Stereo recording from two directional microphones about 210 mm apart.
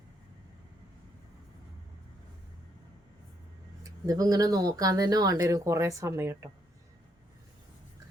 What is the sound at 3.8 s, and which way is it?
Speech, 15° right (ahead or behind).